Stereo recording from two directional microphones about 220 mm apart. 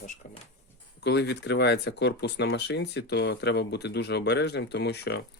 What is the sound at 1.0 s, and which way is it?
Speech, 50° left (ahead or behind).